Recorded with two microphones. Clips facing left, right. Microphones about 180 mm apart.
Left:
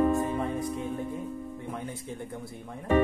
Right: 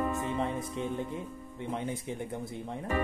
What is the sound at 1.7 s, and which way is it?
Speech, 20° right (ahead or behind).